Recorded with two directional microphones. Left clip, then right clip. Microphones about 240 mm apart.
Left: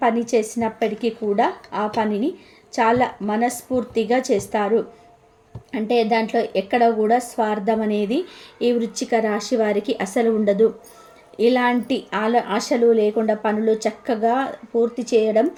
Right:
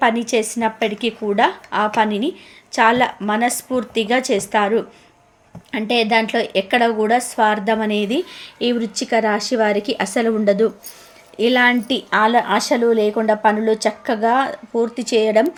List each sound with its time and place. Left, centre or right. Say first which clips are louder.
0.0 s a woman's voice: right 2 dB; centre